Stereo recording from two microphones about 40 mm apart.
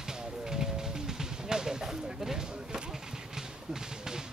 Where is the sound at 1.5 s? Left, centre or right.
Centre.